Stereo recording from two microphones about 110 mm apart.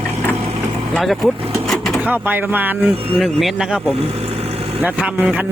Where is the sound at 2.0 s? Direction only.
15° right (ahead or behind).